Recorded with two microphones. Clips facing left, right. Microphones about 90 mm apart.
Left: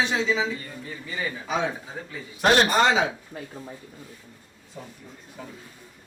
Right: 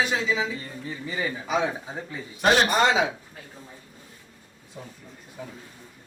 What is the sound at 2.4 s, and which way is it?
Speech, centre (ahead or behind).